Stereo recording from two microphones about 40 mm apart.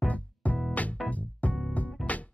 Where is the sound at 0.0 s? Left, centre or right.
Left.